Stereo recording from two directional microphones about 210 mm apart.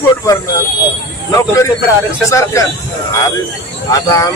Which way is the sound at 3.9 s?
15° left (ahead or behind).